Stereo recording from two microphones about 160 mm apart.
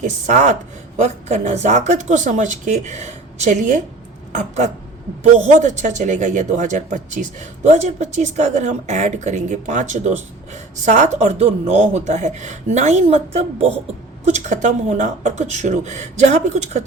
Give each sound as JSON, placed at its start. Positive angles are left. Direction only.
{"t": 0.0, "sound": "speech", "side_deg": -50}